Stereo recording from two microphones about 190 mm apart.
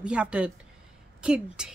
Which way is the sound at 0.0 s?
5° right (ahead or behind).